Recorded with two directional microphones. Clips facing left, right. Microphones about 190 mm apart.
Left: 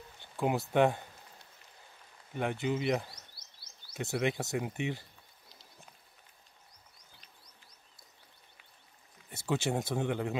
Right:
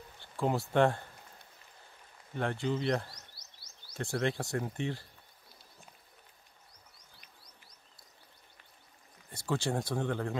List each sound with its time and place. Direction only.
0.4 s speech: 20° left (ahead or behind)
0.7 s speech: 5° left (ahead or behind)
2.3 s speech: 15° left (ahead or behind)
9.3 s speech: 25° left (ahead or behind)
9.9 s speech: 10° left (ahead or behind)